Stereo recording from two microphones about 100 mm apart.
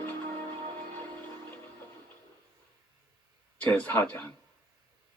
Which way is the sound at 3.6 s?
15° left (ahead or behind).